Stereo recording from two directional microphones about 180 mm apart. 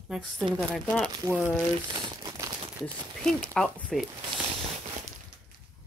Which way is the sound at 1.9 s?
25° right (ahead or behind).